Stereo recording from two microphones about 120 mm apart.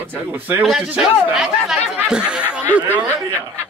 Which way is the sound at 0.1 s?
15° right (ahead or behind).